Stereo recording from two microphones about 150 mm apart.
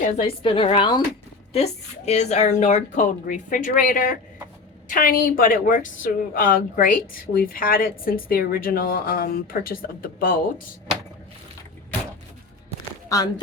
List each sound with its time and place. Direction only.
0.2 s speech: 35° left (ahead or behind)
1.5 s a woman's voice: 45° left (ahead or behind); by 10.4 s 70° left (ahead or behind)
13.1 s speech: 25° left (ahead or behind)